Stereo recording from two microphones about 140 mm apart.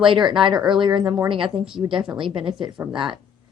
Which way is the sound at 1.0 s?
15° right (ahead or behind).